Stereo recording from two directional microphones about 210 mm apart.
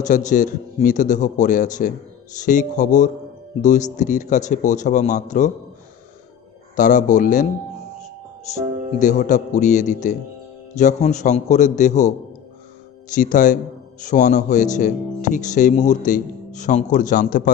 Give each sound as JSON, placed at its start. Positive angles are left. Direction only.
{"t": 0.1, "sound": "speech", "side_deg": 35}
{"t": 6.7, "sound": "speech", "side_deg": 35}
{"t": 9.0, "sound": "speech", "side_deg": 35}
{"t": 13.1, "sound": "speech", "side_deg": 40}